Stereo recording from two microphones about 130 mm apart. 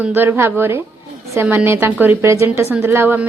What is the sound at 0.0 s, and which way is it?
A woman's voice, 15° right (ahead or behind).